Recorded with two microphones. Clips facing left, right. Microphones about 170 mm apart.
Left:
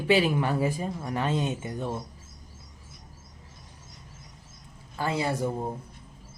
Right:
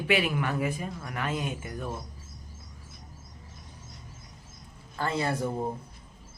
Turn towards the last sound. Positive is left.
turn(degrees=15)  # may be behind; listen again after turning